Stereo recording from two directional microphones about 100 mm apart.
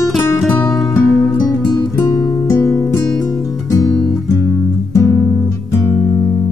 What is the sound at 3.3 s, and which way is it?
Music, centre (ahead or behind).